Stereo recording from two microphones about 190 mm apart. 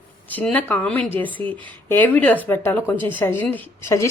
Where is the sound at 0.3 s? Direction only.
10° left (ahead or behind).